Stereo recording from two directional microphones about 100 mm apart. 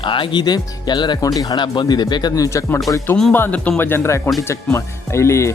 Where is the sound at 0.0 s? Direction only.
55° left (ahead or behind).